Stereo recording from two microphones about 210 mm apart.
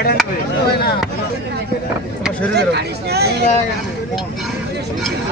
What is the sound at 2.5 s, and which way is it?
Speech, 50° right (ahead or behind).